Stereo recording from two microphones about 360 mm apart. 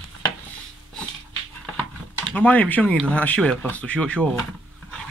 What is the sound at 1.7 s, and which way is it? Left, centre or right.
Speech, centre.